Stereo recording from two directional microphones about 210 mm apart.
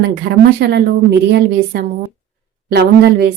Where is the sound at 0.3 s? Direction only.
45° right (ahead or behind).